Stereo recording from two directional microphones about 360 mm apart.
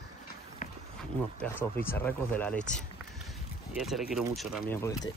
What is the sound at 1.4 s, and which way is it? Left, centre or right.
Speech, centre.